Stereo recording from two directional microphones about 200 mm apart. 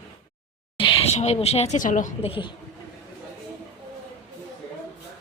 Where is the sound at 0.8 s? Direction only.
25° left (ahead or behind).